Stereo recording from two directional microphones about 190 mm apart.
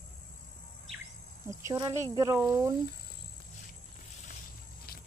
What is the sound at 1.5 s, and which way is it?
Speech, 15° right (ahead or behind).